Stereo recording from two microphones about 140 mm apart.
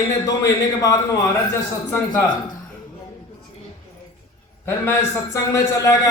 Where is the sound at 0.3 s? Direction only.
25° left (ahead or behind).